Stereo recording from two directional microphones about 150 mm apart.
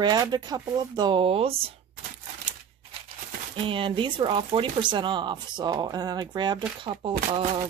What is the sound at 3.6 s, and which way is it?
Speech, 35° right (ahead or behind).